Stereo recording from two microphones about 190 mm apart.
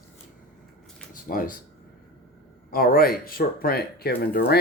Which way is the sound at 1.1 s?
45° left (ahead or behind).